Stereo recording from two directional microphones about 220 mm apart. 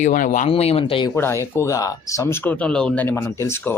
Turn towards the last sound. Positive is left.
turn(degrees=10)  # may be behind; listen again after turning